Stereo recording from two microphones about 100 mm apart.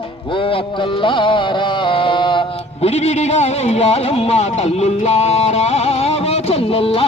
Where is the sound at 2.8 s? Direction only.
90° left.